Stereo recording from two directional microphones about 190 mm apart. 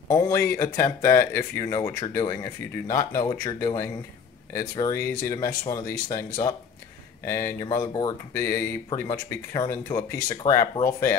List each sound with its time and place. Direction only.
0.1 s speech: 15° left (ahead or behind)
8.3 s speech: 10° left (ahead or behind)